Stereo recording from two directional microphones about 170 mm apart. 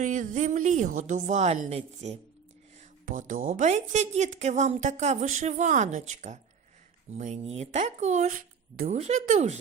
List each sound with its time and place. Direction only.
0.0 s a woman's voice: 50° right (ahead or behind)
9.0 s speech: 40° right (ahead or behind)